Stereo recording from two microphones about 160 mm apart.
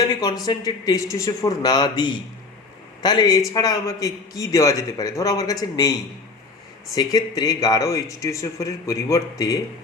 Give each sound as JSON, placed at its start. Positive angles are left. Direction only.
{"t": 0.4, "sound": "a man's voice", "side_deg": 20}
{"t": 6.9, "sound": "a man's voice", "side_deg": 25}